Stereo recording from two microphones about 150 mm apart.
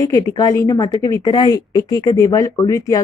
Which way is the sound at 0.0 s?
25° left (ahead or behind).